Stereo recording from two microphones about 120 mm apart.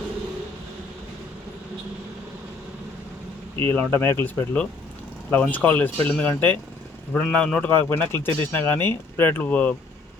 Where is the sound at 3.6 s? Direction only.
20° left (ahead or behind).